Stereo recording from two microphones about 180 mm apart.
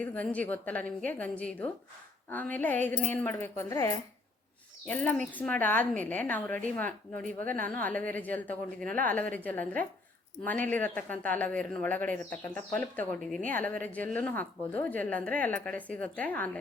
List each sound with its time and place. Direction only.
0.0 s speech: 10° left (ahead or behind)